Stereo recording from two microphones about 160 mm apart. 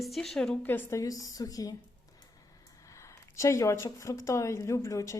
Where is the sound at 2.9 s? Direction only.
20° left (ahead or behind).